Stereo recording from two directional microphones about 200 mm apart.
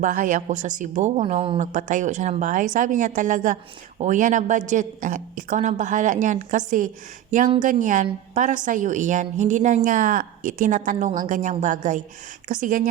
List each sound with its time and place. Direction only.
0.0 s speech: 45° right (ahead or behind)